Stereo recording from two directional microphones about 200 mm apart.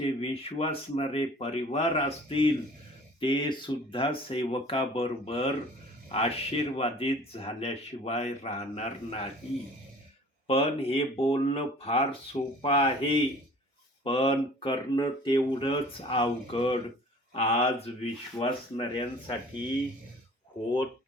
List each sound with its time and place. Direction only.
0.0 s speech: 30° left (ahead or behind)
10.4 s speech: 30° left (ahead or behind)